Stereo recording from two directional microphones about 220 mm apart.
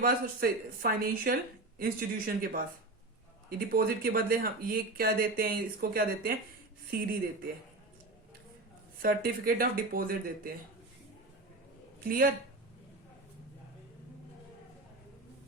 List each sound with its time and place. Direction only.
0.0 s speech: 40° right (ahead or behind)
3.7 s speech: 40° right (ahead or behind)
9.0 s speech: 40° right (ahead or behind)
12.0 s speech: 40° right (ahead or behind)